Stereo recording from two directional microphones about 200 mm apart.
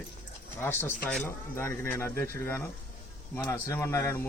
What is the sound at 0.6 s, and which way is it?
Speech, 10° left (ahead or behind).